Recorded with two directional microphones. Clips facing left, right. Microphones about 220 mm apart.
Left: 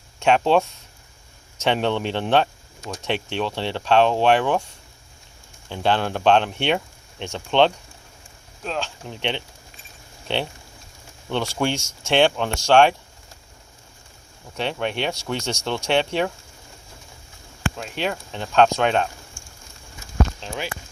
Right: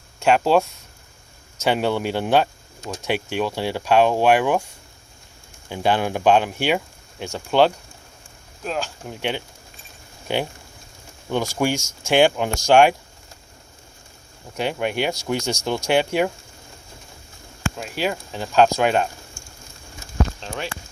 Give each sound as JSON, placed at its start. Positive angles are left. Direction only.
{"t": 0.2, "sound": "speech", "side_deg": -5}
{"t": 1.6, "sound": "speech", "side_deg": -5}
{"t": 5.6, "sound": "speech", "side_deg": -10}
{"t": 11.5, "sound": "speech", "side_deg": -5}
{"t": 14.5, "sound": "speech", "side_deg": -10}
{"t": 17.7, "sound": "speech", "side_deg": -5}